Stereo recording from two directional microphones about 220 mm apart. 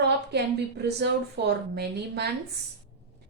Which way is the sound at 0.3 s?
50° right (ahead or behind).